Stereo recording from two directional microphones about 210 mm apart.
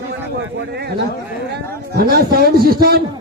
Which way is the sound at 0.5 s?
55° right (ahead or behind).